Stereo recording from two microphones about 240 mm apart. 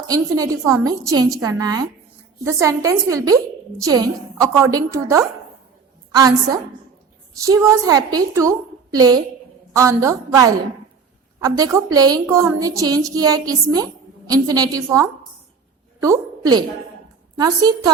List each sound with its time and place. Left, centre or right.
0.1 s a woman's voice: centre